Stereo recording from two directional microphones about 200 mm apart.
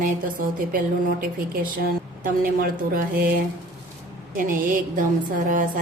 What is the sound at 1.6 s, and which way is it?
Mantra, 45° right (ahead or behind).